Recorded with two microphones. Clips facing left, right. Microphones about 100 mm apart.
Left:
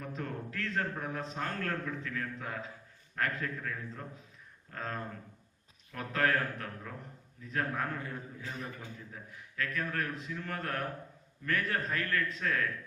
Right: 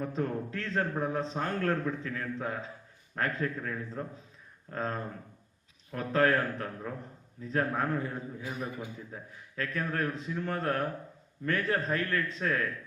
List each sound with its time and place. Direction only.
0.0 s a man's voice: 30° right (ahead or behind)
8.4 s a man's voice: 15° right (ahead or behind)
9.1 s a man's voice: 30° right (ahead or behind)